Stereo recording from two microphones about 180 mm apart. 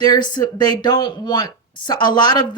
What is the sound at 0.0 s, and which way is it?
Speech, 25° left (ahead or behind).